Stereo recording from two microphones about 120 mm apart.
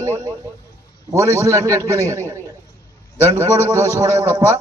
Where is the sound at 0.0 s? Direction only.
25° right (ahead or behind).